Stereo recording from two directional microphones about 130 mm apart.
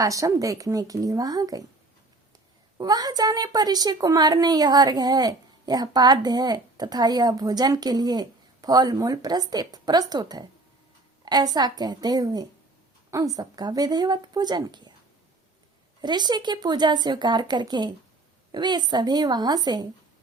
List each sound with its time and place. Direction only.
0.0 s speech: 25° right (ahead or behind)
2.7 s a woman's voice: 30° right (ahead or behind)
11.5 s a woman's voice: 30° right (ahead or behind)
16.0 s a woman's voice: 35° right (ahead or behind)